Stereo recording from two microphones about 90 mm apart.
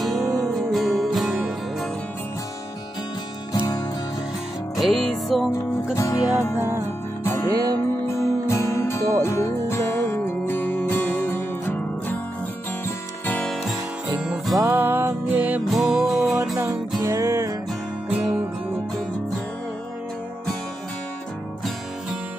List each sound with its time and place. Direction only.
0.2 s music: 40° right (ahead or behind)
0.6 s music: centre (ahead or behind)
4.7 s music: centre (ahead or behind)
5.9 s music: 40° left (ahead or behind)
7.2 s music: 25° left (ahead or behind)
7.5 s music: 45° right (ahead or behind)
8.1 s music: 30° left (ahead or behind)
13.4 s music: 5° left (ahead or behind)
14.7 s music: 25° right (ahead or behind)
15.7 s music: centre (ahead or behind)
17.0 s music: 35° right (ahead or behind)